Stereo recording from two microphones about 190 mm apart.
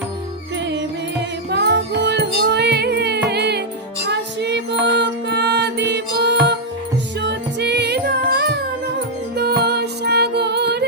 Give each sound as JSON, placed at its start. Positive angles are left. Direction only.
{"t": 1.5, "sound": "music", "side_deg": -65}